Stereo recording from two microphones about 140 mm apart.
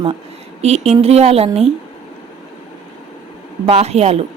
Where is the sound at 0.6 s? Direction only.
50° right (ahead or behind).